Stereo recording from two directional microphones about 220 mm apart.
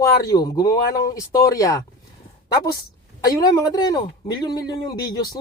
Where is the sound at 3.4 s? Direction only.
15° left (ahead or behind).